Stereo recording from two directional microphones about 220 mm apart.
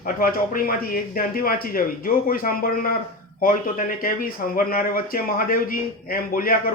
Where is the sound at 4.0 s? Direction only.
40° left (ahead or behind).